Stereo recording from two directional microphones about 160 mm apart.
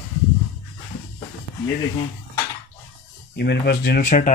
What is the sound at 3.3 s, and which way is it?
Speech, 90° left.